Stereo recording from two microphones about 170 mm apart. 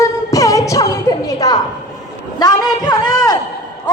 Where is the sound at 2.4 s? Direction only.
25° left (ahead or behind).